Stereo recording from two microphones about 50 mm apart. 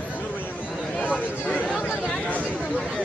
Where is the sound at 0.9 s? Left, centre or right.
Left.